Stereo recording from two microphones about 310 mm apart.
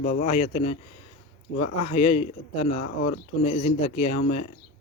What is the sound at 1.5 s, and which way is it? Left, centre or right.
Speech, left.